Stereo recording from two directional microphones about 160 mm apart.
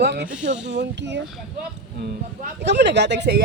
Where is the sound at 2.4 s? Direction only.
90° right.